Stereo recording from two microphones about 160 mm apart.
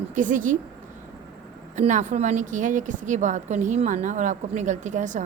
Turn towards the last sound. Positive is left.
turn(degrees=-50)  # may be behind; listen again after turning